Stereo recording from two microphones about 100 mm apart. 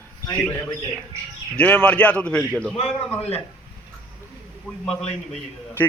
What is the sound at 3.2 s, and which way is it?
Speech, 90° left.